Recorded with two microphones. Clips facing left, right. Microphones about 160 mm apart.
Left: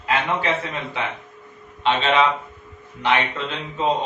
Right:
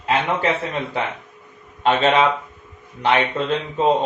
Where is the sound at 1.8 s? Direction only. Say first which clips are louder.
Right 3 dB; 45° right (ahead or behind).